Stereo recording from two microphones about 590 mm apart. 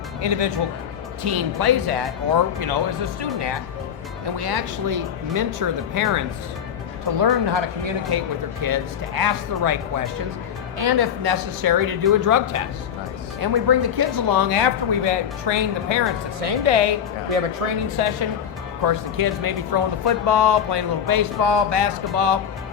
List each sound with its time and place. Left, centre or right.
0.2 s speech: right
17.3 s speech: right
17.9 s speech: right
18.9 s speech: right